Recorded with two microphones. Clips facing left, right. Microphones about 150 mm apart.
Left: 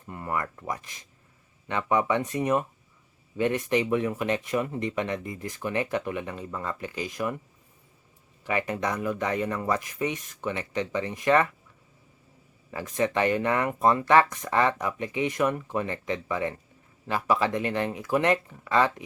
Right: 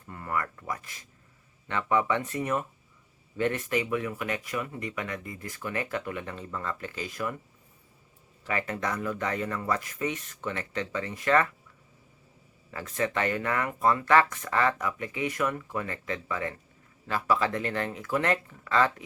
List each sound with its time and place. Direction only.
0.1 s speech: 20° left (ahead or behind)
8.4 s speech: 15° left (ahead or behind)
12.7 s speech: 15° left (ahead or behind)